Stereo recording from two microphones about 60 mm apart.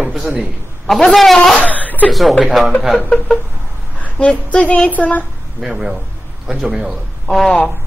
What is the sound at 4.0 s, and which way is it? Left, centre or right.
Speech, left.